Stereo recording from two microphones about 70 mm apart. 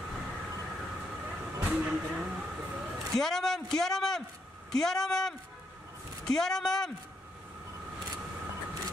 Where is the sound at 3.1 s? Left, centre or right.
Centre.